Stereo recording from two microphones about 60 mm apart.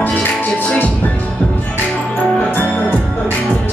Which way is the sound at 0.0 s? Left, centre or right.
Left.